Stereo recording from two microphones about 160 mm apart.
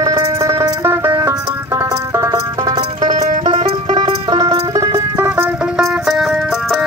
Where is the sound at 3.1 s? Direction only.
50° right (ahead or behind).